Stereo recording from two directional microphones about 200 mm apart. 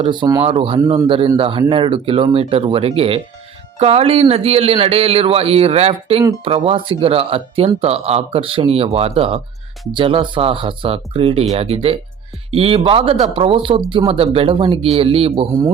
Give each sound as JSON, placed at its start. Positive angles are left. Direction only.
{"t": 0.0, "sound": "speech", "side_deg": -25}